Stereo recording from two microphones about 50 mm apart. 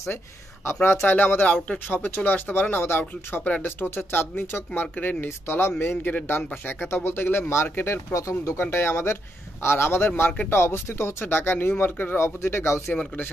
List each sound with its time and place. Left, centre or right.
1.0 s speech: left
12.2 s speech: left